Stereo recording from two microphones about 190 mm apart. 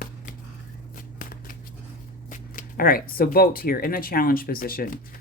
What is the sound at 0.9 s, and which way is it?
Shuffling cards, 45° left (ahead or behind).